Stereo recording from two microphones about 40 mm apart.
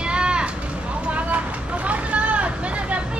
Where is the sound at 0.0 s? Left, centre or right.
Right.